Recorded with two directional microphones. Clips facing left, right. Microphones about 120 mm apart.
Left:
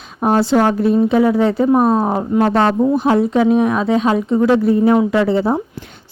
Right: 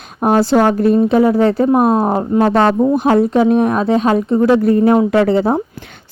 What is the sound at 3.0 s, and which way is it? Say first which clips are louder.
Speech: right 3 dB; 50° right (ahead or behind).